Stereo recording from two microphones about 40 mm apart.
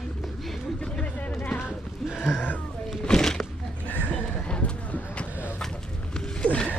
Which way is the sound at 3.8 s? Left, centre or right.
Left.